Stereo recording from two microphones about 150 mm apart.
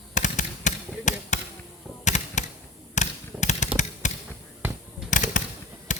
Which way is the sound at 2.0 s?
50° left (ahead or behind).